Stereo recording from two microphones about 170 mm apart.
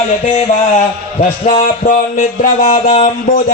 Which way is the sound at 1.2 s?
45° left (ahead or behind).